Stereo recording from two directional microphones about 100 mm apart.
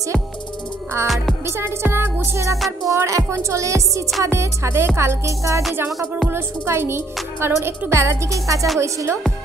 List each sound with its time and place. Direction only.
1.0 s music: centre (ahead or behind)
1.4 s music: 25° right (ahead or behind)